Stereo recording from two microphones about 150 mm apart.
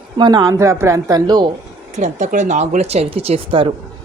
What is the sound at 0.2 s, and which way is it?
A woman's voice, 30° right (ahead or behind).